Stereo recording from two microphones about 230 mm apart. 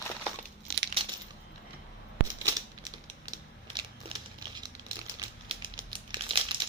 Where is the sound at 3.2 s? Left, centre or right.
Centre.